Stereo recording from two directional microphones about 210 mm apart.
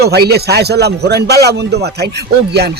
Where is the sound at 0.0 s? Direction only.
50° right (ahead or behind).